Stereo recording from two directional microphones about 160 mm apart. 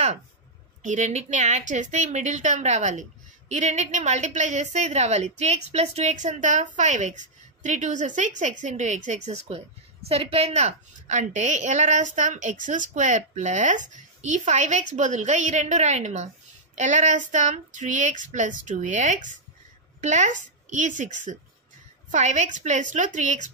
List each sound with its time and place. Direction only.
0.8 s a woman's voice: 50° right (ahead or behind)